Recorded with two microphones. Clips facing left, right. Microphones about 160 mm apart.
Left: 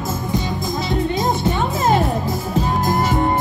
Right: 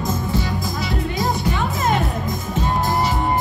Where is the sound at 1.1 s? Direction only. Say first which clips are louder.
Left 3 dB; 25° left (ahead or behind).